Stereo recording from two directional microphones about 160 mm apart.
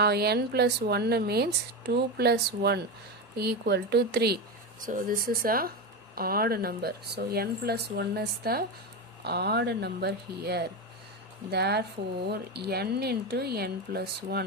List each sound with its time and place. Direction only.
0.0 s speech: 85° right
4.8 s speech: 55° right (ahead or behind); by 8.6 s 75° right (ahead or behind)
9.2 s speech: 90° right